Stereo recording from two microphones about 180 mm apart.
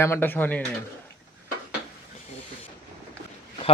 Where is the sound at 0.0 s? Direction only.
10° left (ahead or behind).